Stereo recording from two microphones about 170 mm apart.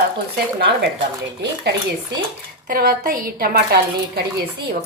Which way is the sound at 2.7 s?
60° right (ahead or behind).